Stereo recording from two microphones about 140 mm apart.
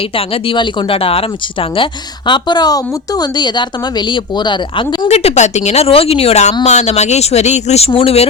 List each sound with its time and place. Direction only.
0.2 s speech: 35° left (ahead or behind)
5.0 s a woman's voice: 50° left (ahead or behind)